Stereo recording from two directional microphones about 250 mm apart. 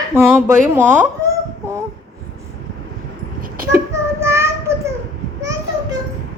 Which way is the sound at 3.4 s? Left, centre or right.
Right.